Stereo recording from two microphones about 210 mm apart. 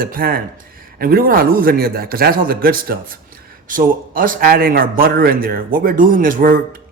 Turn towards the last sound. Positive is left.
turn(degrees=-40)  # may be behind; listen again after turning